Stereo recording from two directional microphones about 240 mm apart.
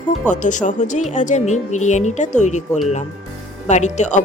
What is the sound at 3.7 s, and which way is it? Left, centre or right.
Speech, left.